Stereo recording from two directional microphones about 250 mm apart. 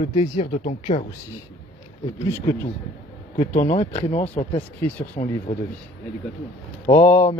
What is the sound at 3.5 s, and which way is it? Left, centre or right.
Speech, left.